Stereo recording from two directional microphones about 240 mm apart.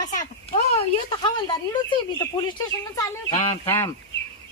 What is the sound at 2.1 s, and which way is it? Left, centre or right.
Speech, centre.